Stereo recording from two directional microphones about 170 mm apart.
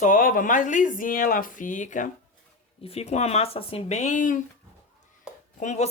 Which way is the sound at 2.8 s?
35° left (ahead or behind).